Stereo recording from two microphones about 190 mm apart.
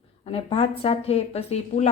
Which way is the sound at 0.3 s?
30° left (ahead or behind).